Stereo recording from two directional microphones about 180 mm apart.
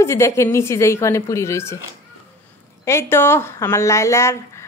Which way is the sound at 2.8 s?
15° left (ahead or behind).